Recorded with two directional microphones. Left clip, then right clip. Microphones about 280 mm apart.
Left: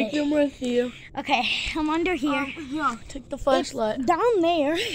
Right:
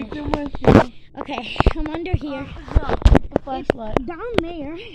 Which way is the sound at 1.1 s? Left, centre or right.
Centre.